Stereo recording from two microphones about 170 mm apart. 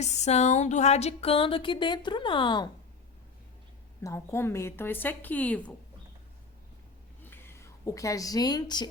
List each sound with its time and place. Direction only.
0.0 s a sound: 40° left (ahead or behind)
4.0 s a woman's voice: 15° left (ahead or behind)
7.3 s a woman's voice: 15° left (ahead or behind)